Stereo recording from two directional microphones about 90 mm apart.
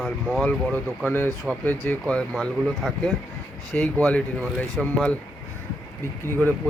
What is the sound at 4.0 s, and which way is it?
Speech, 15° left (ahead or behind).